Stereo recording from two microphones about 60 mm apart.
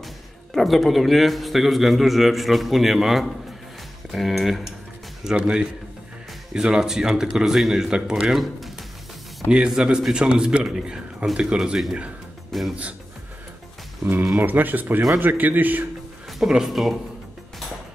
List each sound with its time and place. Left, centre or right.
0.6 s a man's voice: centre
5.2 s speech: centre
12.5 s speech: centre
14.3 s speech: right
16.3 s a man's voice: centre